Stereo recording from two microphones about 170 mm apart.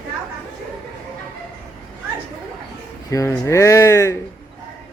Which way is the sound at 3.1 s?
15° left (ahead or behind).